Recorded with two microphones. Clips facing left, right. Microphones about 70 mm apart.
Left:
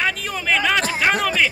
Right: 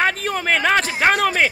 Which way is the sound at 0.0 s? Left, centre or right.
Right.